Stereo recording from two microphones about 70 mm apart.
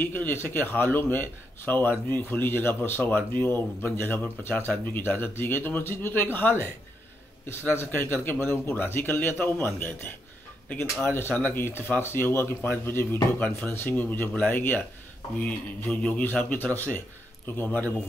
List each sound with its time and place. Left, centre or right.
0.0 s a man's voice: left
11.1 s a man's voice: left